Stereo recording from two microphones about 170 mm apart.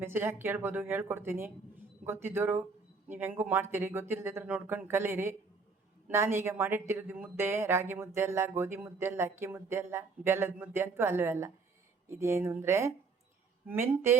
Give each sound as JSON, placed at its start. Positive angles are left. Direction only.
{"t": 0.0, "sound": "speech", "side_deg": -15}